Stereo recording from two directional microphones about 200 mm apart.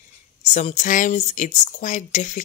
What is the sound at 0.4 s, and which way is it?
Speech, 35° left (ahead or behind).